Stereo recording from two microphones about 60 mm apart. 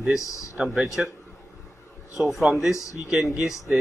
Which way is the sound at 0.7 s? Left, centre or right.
Centre.